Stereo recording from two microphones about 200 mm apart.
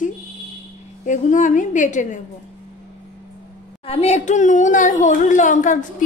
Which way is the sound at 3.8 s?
30° left (ahead or behind).